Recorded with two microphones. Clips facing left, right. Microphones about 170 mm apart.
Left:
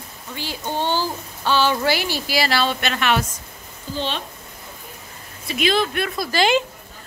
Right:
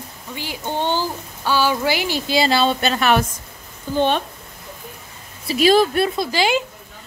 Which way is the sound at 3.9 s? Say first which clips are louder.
Right 8 dB; 55° right (ahead or behind).